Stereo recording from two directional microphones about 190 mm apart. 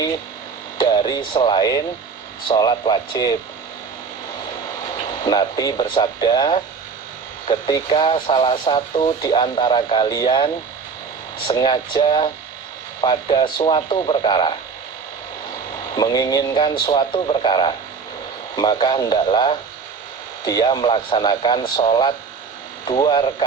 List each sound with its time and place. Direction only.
0.8 s speech: 20° left (ahead or behind)
5.2 s speech: 25° left (ahead or behind)
16.0 s speech: 20° left (ahead or behind)